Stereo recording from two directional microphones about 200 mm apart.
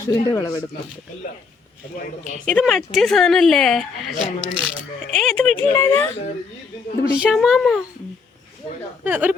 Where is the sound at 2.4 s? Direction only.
Centre (ahead or behind).